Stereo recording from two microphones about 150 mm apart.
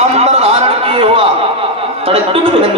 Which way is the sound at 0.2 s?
45° right (ahead or behind).